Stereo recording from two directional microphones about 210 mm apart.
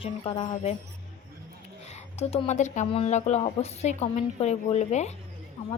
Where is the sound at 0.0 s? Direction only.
25° left (ahead or behind).